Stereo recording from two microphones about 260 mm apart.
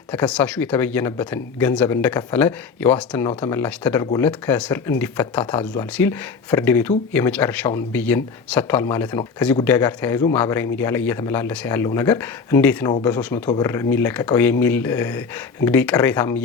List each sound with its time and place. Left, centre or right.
0.1 s speech: centre
4.3 s speech: centre